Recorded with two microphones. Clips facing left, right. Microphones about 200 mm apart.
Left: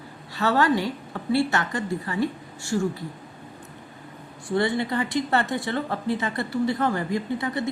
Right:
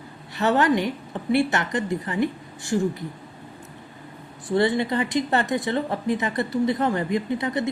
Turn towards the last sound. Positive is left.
turn(degrees=-20)  # may be behind; listen again after turning